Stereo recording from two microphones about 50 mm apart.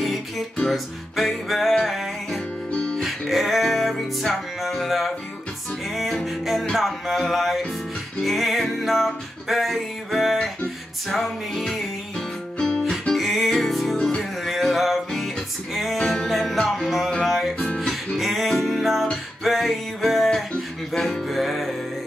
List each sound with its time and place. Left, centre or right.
0.0 s music: centre
2.7 s music: centre
3.0 s music: centre
13.2 s music: centre